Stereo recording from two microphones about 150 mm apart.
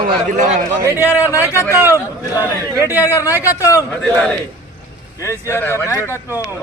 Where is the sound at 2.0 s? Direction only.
15° left (ahead or behind).